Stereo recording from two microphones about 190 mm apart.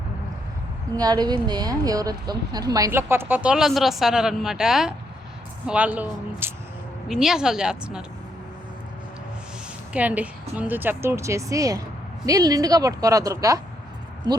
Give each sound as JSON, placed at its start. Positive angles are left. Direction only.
{"t": 0.9, "sound": "a woman's voice", "side_deg": -20}
{"t": 9.9, "sound": "a woman's voice", "side_deg": -10}